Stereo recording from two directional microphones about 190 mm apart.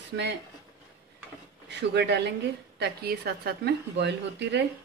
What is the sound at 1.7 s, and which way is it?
A woman's voice, 65° right (ahead or behind).